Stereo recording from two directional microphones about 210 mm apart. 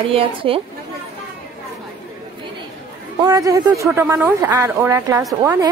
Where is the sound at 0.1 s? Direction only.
25° right (ahead or behind).